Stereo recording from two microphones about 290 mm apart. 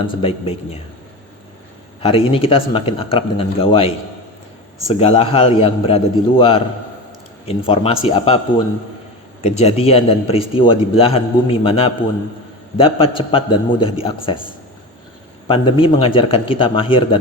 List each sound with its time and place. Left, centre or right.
0.2 s speech: centre
2.0 s a man's voice: centre
15.4 s a man's voice: centre